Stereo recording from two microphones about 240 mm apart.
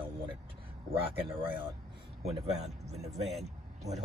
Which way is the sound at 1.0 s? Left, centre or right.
Right.